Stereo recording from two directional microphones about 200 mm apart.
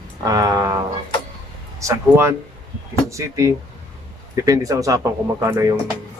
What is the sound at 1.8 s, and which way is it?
Speech, 15° right (ahead or behind).